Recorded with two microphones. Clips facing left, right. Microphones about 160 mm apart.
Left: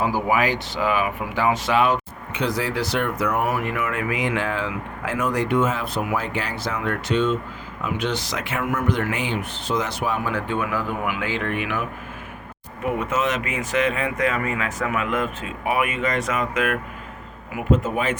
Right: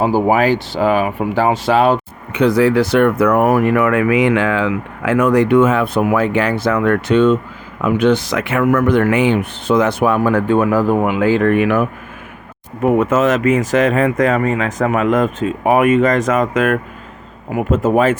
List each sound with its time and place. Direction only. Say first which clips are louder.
0.0 s speech: right 8 dB; 30° right (ahead or behind)
2.3 s speech: right 12 dB; 60° right (ahead or behind)